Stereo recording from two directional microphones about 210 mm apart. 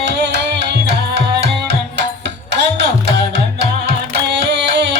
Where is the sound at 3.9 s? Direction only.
55° right (ahead or behind).